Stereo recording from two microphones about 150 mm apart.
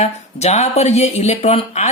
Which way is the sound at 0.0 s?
45° left (ahead or behind).